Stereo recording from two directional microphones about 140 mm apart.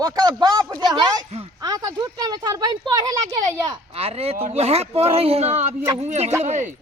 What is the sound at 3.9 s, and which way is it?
Speech, 45° right (ahead or behind).